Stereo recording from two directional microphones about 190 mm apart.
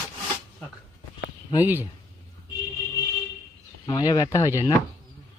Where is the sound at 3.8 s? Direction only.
20° left (ahead or behind).